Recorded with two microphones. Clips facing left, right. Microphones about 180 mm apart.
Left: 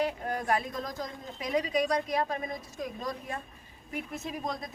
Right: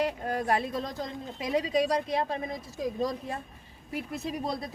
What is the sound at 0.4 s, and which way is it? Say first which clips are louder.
A woman's voice: right 2 dB; 30° right (ahead or behind).